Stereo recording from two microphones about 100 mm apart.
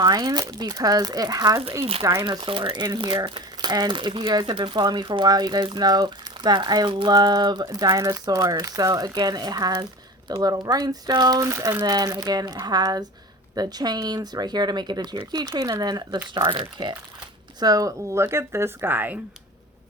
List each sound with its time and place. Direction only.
0.0 s speech: 40° right (ahead or behind)
1.8 s speech: 75° right (ahead or behind)
2.4 s speech: 60° right (ahead or behind)
17.6 s speech: 40° right (ahead or behind); by 19.2 s 20° right (ahead or behind)